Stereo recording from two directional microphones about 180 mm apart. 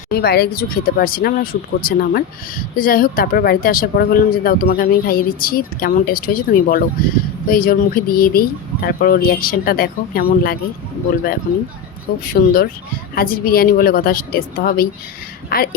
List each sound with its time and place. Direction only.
0.1 s speech: 60° left (ahead or behind)
12.2 s a woman's voice: 55° left (ahead or behind)